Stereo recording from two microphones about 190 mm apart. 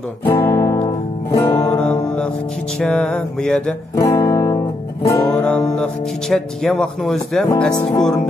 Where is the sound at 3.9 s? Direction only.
15° left (ahead or behind).